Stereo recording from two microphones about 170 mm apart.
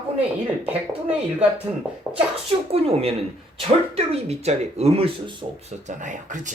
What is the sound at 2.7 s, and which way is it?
A woman's voice, 35° right (ahead or behind).